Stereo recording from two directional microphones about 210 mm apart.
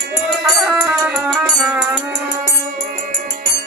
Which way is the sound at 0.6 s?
5° right (ahead or behind).